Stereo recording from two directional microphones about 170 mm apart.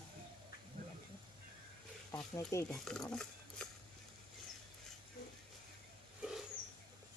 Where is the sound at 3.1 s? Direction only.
5° left (ahead or behind).